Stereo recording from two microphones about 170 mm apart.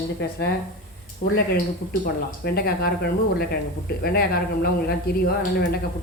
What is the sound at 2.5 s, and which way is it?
Speech, 65° left (ahead or behind).